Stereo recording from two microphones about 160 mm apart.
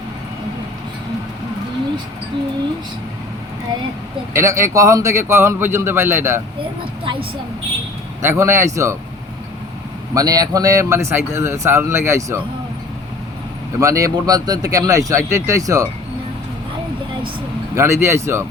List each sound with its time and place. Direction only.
4.4 s speech: 20° right (ahead or behind)
8.2 s speech: 15° right (ahead or behind)
10.2 s speech: 25° right (ahead or behind)
13.7 s speech: 20° right (ahead or behind)
17.7 s speech: 15° right (ahead or behind)